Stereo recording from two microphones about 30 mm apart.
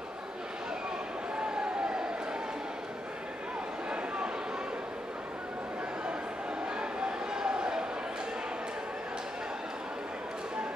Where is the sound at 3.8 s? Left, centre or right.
Right.